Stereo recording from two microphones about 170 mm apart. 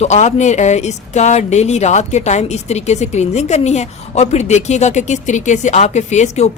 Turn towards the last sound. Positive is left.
turn(degrees=40)  # may be behind; listen again after turning